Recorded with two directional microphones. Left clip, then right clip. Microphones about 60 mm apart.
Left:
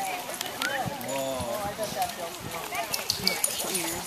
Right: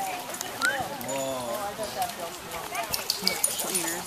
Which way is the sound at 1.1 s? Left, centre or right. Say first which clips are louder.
Right 1 dB; centre.